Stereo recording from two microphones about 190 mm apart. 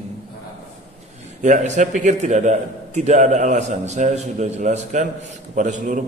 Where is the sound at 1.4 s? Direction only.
40° right (ahead or behind).